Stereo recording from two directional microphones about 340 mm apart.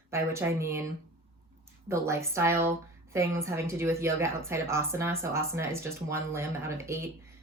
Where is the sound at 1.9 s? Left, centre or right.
Centre.